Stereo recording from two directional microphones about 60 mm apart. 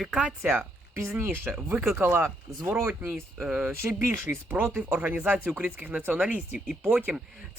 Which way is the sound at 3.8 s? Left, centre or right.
Right.